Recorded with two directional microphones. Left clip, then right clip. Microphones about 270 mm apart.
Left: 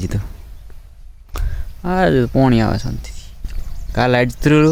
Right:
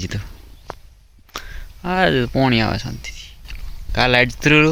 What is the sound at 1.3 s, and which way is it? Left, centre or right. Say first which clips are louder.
Speech: right 2 dB; centre.